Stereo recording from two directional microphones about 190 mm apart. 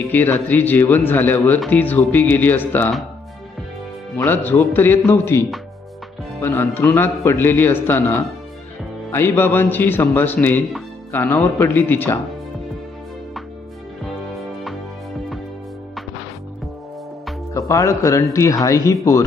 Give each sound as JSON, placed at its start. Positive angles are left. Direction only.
{"t": 0.1, "sound": "speech", "side_deg": 10}
{"t": 4.2, "sound": "speech", "side_deg": 10}
{"t": 17.5, "sound": "speech", "side_deg": 15}